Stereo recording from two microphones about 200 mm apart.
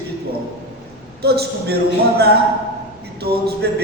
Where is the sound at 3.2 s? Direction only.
50° right (ahead or behind).